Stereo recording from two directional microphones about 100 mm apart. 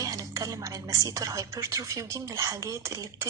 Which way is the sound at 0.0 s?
35° right (ahead or behind).